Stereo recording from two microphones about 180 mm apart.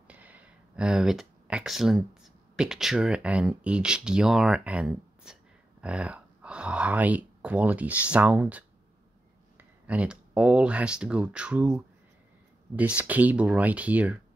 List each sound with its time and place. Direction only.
0.1 s speech: 10° right (ahead or behind)